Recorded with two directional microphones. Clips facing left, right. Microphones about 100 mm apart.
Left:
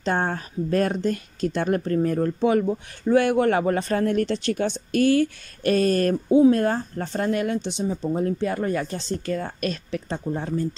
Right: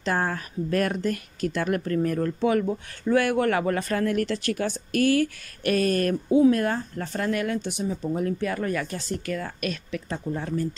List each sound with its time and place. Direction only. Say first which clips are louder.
0.0 s speech: left 2 dB; 30° left (ahead or behind)